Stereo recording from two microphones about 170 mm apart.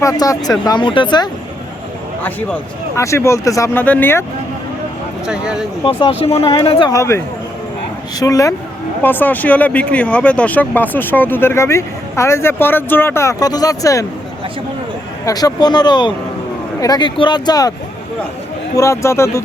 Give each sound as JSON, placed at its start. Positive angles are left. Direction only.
{"t": 0.0, "sound": "speech", "side_deg": 20}
{"t": 2.2, "sound": "speech", "side_deg": 15}
{"t": 5.2, "sound": "speech", "side_deg": -5}
{"t": 6.0, "sound": "speech", "side_deg": 35}
{"t": 6.9, "sound": "speech", "side_deg": 15}
{"t": 8.2, "sound": "speech", "side_deg": 20}
{"t": 15.2, "sound": "speech", "side_deg": 20}
{"t": 18.8, "sound": "speech", "side_deg": 15}